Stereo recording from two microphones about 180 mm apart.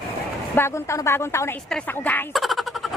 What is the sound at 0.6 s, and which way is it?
Speech, 15° left (ahead or behind).